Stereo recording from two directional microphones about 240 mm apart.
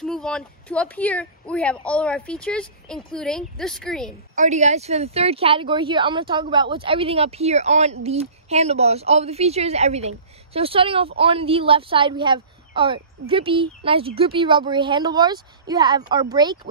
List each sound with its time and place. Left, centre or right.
0.0 s speech: centre
4.4 s speech: right